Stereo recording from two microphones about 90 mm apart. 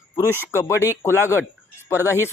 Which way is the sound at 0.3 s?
30° left (ahead or behind).